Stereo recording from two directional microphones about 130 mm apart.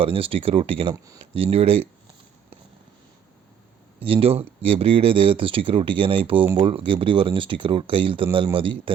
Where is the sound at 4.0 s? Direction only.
45° right (ahead or behind).